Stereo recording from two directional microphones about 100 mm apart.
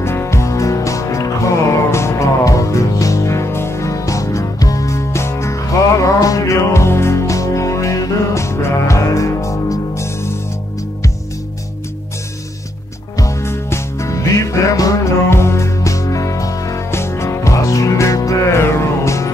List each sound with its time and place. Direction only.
0.0 s music: 25° left (ahead or behind)
13.2 s music: 30° left (ahead or behind)